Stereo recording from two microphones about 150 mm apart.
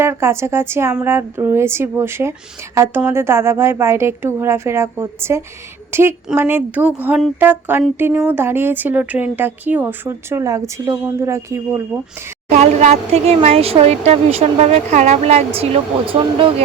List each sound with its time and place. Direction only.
0.0 s a woman's voice: 15° right (ahead or behind)
12.5 s speech: 50° right (ahead or behind)